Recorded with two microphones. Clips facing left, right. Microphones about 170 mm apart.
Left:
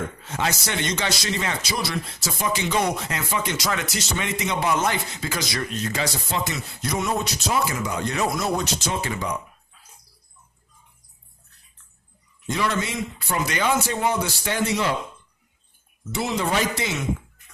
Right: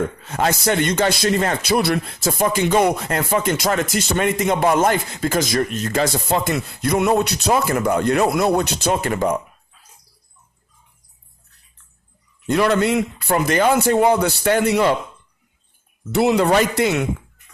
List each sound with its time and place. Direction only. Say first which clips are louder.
0.3 s speech: right 7 dB; 50° right (ahead or behind)
12.5 s a man's voice: right 9 dB; 60° right (ahead or behind)
16.1 s a man's voice: right 9 dB; 65° right (ahead or behind)